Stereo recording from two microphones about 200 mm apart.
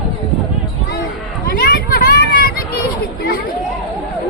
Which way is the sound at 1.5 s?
45° left (ahead or behind).